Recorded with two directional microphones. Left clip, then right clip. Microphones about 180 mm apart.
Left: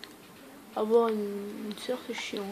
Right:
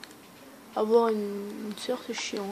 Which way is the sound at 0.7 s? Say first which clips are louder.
Right 2 dB; 15° right (ahead or behind).